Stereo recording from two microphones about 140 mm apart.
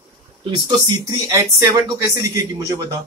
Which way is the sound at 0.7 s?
25° right (ahead or behind).